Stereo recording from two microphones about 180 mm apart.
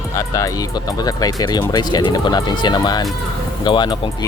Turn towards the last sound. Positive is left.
turn(degrees=25)  # may be behind; listen again after turning